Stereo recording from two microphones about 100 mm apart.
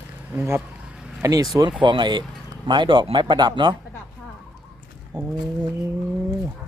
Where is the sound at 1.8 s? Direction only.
50° right (ahead or behind).